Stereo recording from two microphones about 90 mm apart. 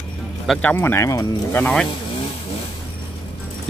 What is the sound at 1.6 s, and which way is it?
Speech, 5° left (ahead or behind).